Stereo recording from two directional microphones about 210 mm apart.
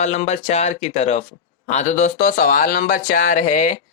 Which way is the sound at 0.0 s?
35° left (ahead or behind).